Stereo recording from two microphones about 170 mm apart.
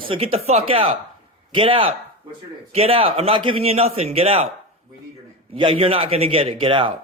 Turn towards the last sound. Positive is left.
turn(degrees=-30)  # may be behind; listen again after turning